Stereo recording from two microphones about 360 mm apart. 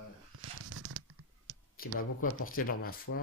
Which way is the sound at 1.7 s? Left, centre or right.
Left.